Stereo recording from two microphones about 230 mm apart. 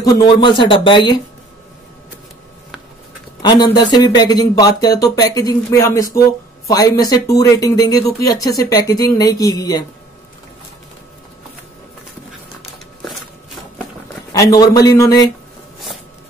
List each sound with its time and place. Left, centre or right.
0.0 s speech: centre
3.7 s speech: centre
12.3 s a sound: centre
14.3 s speech: centre